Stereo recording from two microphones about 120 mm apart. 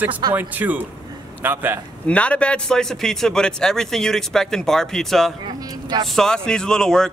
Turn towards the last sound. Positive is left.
turn(degrees=5)  # may be behind; listen again after turning